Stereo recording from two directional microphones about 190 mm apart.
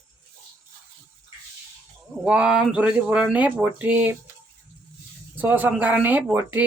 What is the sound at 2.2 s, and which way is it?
Speech, 5° right (ahead or behind).